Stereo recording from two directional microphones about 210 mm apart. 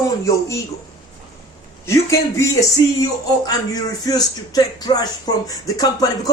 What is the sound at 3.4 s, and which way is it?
Speech, 20° left (ahead or behind).